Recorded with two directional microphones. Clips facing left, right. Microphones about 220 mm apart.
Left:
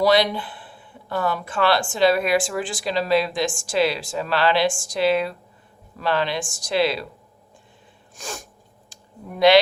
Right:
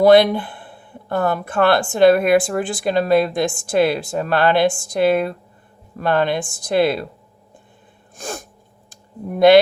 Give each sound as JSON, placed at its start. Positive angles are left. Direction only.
{"t": 0.0, "sound": "speech", "side_deg": -55}
{"t": 8.1, "sound": "sneeze", "side_deg": -55}
{"t": 8.9, "sound": "a sound", "side_deg": -55}